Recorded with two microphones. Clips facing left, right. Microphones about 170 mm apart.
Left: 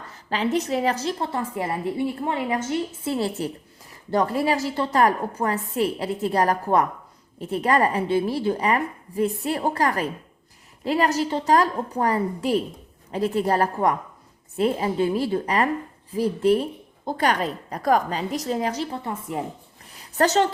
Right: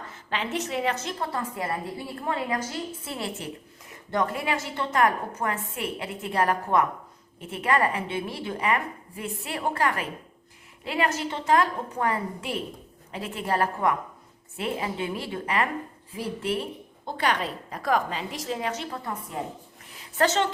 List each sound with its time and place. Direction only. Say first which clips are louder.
0.1 s a woman's voice: left 7 dB; 35° left (ahead or behind)
20.0 s a woman's voice: left 4 dB; 40° left (ahead or behind)